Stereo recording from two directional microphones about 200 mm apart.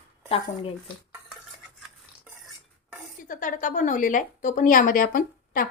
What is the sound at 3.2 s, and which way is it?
A woman's voice, 40° left (ahead or behind).